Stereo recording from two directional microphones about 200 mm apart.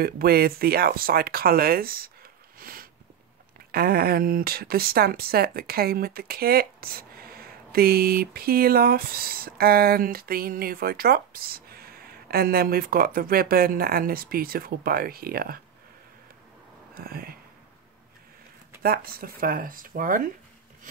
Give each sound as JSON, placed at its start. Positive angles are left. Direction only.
{"t": 0.0, "sound": "speech", "side_deg": -50}
{"t": 2.6, "sound": "a sound", "side_deg": -45}
{"t": 3.7, "sound": "speech", "side_deg": -50}
{"t": 16.9, "sound": "speech", "side_deg": -50}
{"t": 18.8, "sound": "speech", "side_deg": -50}